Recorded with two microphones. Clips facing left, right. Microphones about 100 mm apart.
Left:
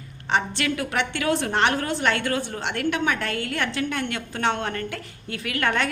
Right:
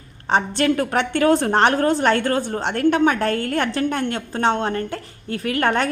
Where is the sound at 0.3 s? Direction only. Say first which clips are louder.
Right 5 dB; 40° right (ahead or behind).